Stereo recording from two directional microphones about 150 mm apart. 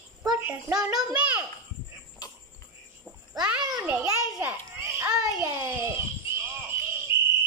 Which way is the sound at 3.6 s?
20° right (ahead or behind).